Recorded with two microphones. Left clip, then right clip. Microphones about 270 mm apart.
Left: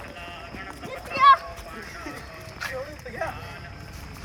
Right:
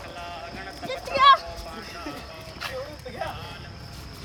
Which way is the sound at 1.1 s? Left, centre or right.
Right.